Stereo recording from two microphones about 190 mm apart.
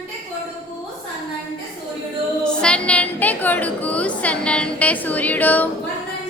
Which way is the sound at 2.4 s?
5° left (ahead or behind).